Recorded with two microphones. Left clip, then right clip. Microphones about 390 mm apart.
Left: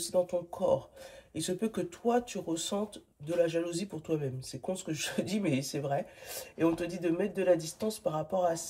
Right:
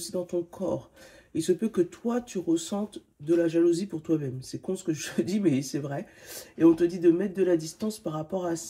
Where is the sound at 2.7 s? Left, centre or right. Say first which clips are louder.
Right 1 dB; left.